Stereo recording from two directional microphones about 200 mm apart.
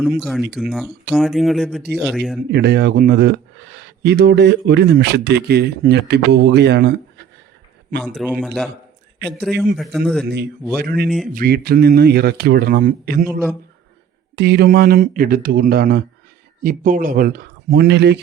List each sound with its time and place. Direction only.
0.2 s speech: centre (ahead or behind)
2.5 s speech: 55° right (ahead or behind)
8.0 s speech: 5° right (ahead or behind)
10.2 s speech: 55° right (ahead or behind)
14.3 s speech: 55° right (ahead or behind)